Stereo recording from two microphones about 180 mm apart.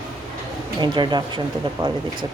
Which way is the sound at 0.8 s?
25° right (ahead or behind).